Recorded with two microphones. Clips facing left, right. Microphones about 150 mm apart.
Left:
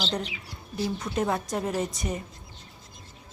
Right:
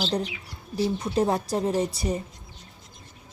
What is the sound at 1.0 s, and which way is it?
A woman's voice, 30° right (ahead or behind).